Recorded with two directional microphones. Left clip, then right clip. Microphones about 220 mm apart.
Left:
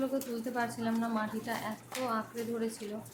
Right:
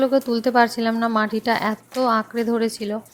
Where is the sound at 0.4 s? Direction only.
40° right (ahead or behind).